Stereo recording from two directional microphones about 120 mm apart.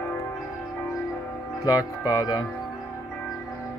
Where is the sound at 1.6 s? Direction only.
30° left (ahead or behind).